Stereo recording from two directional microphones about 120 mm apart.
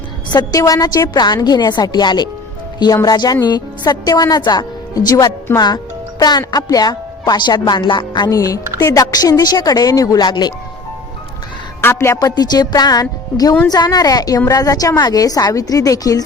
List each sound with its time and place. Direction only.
0.3 s a woman's voice: 35° left (ahead or behind)
5.5 s music: 35° left (ahead or behind)
6.5 s a woman's voice: 30° left (ahead or behind)
11.8 s a woman's voice: 20° left (ahead or behind)